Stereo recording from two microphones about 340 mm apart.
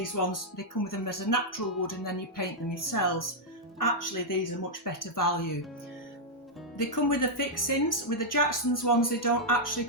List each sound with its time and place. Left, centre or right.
0.0 s speech: left
6.7 s a woman's voice: left